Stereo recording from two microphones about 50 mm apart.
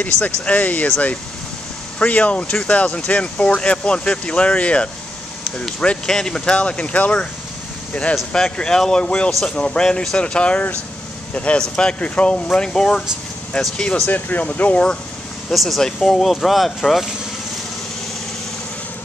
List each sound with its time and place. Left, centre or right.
0.2 s speech: left
2.0 s speech: left
6.0 s speech: centre
11.6 s speech: centre
14.0 s speech: left
15.5 s speech: centre